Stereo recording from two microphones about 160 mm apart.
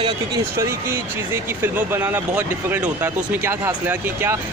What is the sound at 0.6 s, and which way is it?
Speech, 15° right (ahead or behind).